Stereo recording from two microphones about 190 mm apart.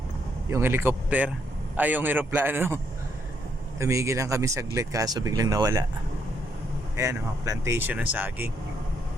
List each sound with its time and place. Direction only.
0.5 s speech: 10° right (ahead or behind)
6.9 s speech: 15° right (ahead or behind)